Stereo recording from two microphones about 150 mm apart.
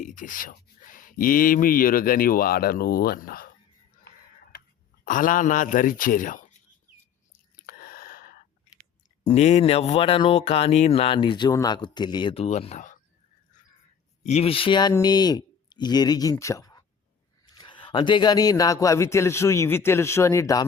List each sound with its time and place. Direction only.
0.0 s speech: 60° left (ahead or behind)
5.0 s speech: 60° left (ahead or behind)
7.5 s a sound: 75° left (ahead or behind)
9.2 s speech: 45° left (ahead or behind)
14.3 s a man's voice: 45° left (ahead or behind); by 20.7 s 20° left (ahead or behind)